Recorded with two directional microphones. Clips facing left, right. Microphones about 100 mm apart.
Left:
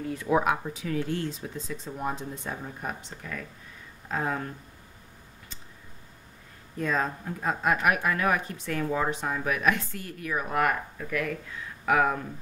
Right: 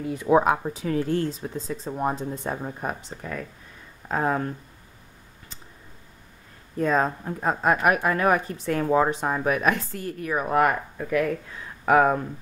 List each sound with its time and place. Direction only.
0.3 s a woman's voice: 30° right (ahead or behind)
6.8 s a woman's voice: 40° right (ahead or behind)